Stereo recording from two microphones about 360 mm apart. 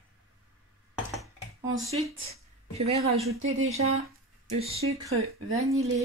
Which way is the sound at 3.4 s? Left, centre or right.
Right.